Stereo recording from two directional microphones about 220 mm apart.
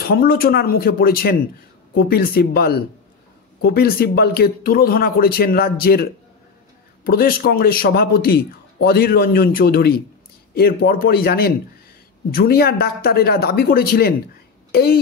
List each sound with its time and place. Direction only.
0.1 s speech: 45° left (ahead or behind)
7.1 s speech: 40° left (ahead or behind)